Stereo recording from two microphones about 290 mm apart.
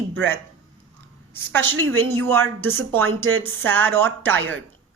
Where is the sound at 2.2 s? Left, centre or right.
Centre.